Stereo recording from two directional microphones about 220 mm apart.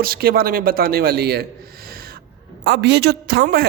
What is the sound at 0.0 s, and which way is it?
A man's voice, 45° right (ahead or behind).